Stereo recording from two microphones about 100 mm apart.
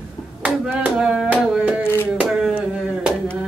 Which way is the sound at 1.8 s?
20° left (ahead or behind).